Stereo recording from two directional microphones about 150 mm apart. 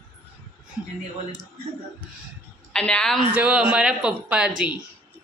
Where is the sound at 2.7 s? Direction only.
5° left (ahead or behind).